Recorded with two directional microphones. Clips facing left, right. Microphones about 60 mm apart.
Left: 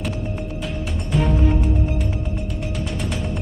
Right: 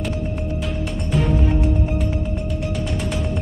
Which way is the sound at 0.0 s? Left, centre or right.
Centre.